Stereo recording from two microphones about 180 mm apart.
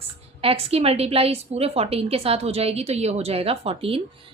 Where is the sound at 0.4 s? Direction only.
35° right (ahead or behind).